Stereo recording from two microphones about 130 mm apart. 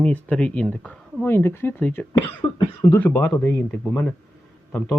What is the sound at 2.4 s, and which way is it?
Speech, 45° left (ahead or behind).